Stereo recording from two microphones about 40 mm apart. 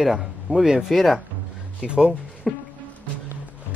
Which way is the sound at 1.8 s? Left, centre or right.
Right.